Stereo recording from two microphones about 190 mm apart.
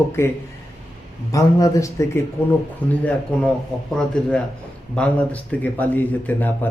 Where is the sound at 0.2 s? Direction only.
10° left (ahead or behind).